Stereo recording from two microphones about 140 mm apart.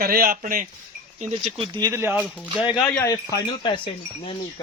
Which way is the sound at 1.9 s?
15° right (ahead or behind).